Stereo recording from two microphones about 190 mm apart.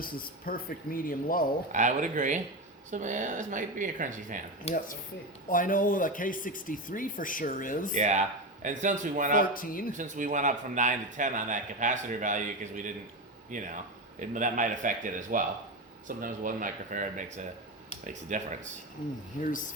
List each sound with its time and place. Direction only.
0.0 s speech: 50° left (ahead or behind)
1.7 s a man's voice: 40° right (ahead or behind)
4.7 s speech: 35° left (ahead or behind)
5.5 s speech: 45° left (ahead or behind)
7.9 s a man's voice: 40° right (ahead or behind)
9.4 s speech: 50° left (ahead or behind)
10.0 s a man's voice: 45° right (ahead or behind)
19.4 s speech: 45° left (ahead or behind)